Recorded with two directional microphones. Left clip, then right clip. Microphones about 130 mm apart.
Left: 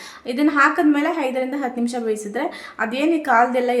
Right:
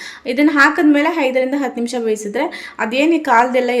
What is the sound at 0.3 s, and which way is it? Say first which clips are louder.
A woman's voice: right 4 dB; 20° right (ahead or behind).